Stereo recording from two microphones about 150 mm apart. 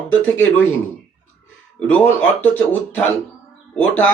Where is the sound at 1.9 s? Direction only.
10° left (ahead or behind).